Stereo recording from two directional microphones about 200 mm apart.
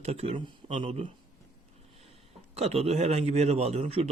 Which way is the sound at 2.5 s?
30° right (ahead or behind).